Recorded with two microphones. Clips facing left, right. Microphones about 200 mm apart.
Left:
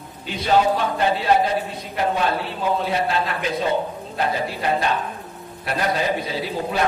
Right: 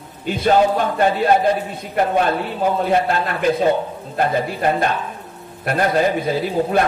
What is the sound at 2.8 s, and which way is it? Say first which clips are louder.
A man's voice: right 4 dB; 50° right (ahead or behind).